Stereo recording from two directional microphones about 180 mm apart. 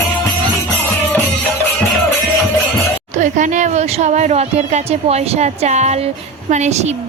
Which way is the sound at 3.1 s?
45° right (ahead or behind).